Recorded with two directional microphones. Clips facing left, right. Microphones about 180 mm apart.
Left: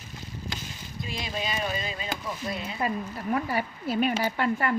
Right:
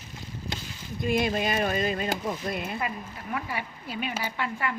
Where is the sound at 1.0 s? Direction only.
50° right (ahead or behind).